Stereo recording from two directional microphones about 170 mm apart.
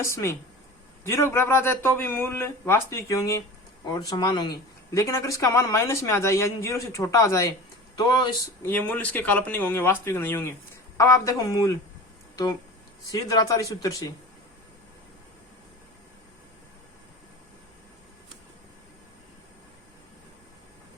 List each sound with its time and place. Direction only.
0.0 s speech: 15° left (ahead or behind)
8.6 s speech: 10° left (ahead or behind)
13.1 s speech: 20° left (ahead or behind)